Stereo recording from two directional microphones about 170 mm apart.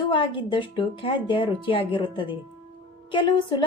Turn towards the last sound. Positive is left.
turn(degrees=30)  # may be behind; listen again after turning